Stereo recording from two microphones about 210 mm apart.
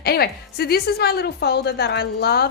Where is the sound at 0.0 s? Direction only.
50° left (ahead or behind).